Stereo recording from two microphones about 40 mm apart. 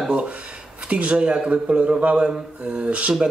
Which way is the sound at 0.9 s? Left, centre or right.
Right.